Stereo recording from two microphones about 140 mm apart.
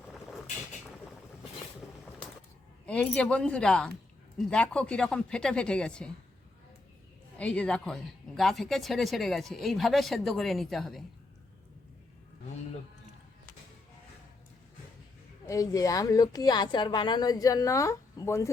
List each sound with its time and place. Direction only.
2.8 s speech: 10° left (ahead or behind)
7.3 s a woman's voice: 10° left (ahead or behind)
15.4 s a woman's voice: 25° left (ahead or behind)